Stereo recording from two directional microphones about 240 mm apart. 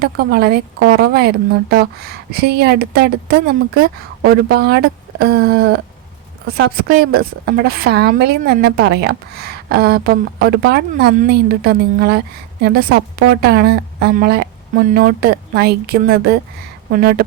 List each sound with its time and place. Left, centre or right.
0.0 s a woman's voice: right